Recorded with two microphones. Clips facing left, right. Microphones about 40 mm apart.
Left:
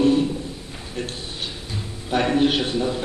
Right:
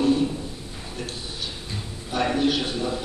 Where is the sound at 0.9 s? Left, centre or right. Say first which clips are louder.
Left 4 dB; left.